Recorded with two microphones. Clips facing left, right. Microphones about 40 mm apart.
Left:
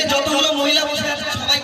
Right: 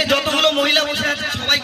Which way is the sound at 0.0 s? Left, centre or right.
Right.